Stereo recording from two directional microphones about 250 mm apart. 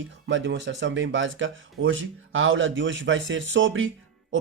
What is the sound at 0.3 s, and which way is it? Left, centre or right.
Speech, right.